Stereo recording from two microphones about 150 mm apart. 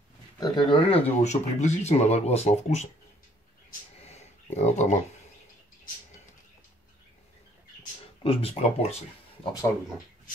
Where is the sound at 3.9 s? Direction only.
45° left (ahead or behind).